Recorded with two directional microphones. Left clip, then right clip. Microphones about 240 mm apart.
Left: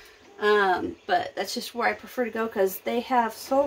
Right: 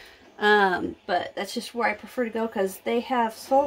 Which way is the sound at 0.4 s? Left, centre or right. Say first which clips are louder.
Right 1 dB; right.